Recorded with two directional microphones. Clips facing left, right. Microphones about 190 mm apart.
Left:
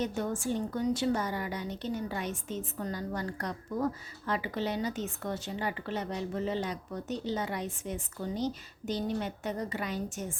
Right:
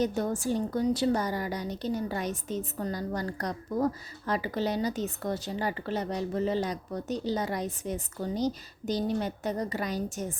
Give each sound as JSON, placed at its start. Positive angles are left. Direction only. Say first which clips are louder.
{"t": 0.0, "sound": "a woman's voice", "louder": "right 4 dB", "side_deg": -40}